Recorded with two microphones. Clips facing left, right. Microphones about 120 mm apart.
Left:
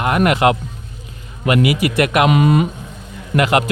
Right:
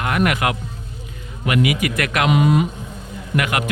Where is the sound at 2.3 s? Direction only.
60° left (ahead or behind).